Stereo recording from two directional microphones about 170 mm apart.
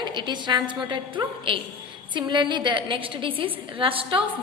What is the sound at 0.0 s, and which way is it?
A woman's voice, 25° right (ahead or behind).